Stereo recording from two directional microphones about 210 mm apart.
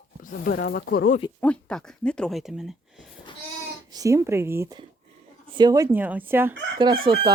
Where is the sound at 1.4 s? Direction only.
5° left (ahead or behind).